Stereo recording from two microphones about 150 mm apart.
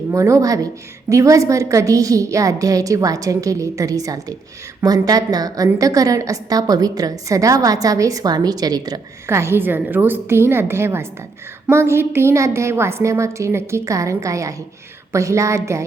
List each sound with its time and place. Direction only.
0.1 s a woman's voice: 20° right (ahead or behind)